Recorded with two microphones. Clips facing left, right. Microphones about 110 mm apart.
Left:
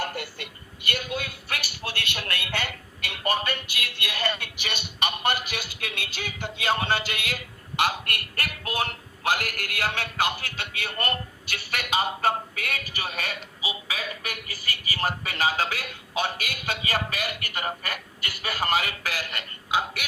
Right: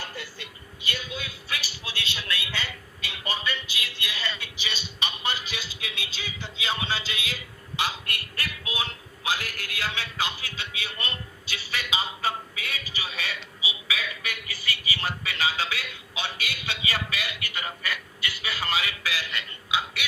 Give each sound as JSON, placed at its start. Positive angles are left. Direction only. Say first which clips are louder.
{"t": 0.0, "sound": "speech", "louder": "left 6 dB", "side_deg": 55}